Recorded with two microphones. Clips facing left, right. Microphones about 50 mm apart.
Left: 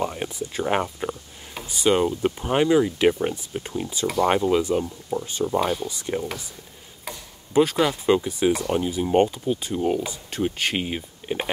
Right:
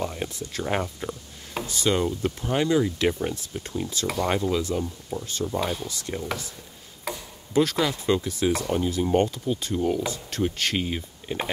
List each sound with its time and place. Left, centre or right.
0.0 s speech: centre
4.3 s speech: left; by 5.9 s centre
5.9 s speech: centre
7.5 s speech: centre